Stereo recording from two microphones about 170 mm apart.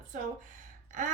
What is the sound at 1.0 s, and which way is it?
Speech, 45° right (ahead or behind).